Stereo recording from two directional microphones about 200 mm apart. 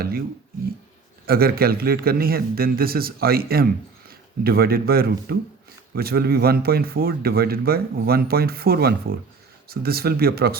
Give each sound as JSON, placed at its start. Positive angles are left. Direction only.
{"t": 1.3, "sound": "a man's voice", "side_deg": -50}